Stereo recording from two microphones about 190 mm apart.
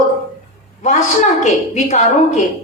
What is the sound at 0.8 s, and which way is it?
A woman's voice, 40° left (ahead or behind).